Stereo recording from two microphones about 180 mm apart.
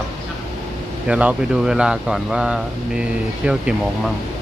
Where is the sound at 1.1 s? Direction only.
5° right (ahead or behind).